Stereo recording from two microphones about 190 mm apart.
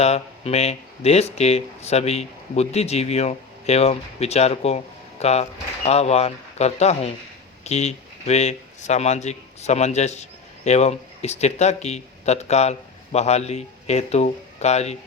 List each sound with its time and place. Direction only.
0.0 s a man's voice: 35° left (ahead or behind)